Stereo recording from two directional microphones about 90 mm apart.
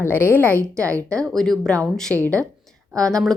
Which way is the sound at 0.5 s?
35° right (ahead or behind).